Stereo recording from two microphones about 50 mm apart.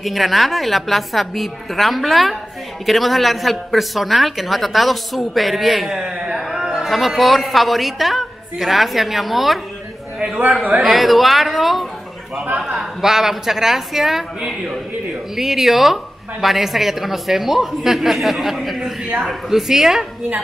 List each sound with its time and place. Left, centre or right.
0.0 s a woman's voice: centre
6.3 s a sound: centre
6.9 s a woman's voice: centre
10.1 s a sound: centre
10.8 s a woman's voice: centre
15.3 s a woman's voice: centre